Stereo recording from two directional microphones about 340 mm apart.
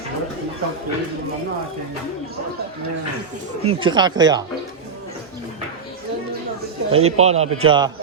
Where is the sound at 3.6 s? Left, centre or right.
Centre.